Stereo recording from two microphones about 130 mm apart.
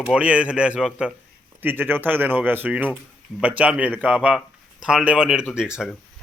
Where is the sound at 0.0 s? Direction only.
10° right (ahead or behind).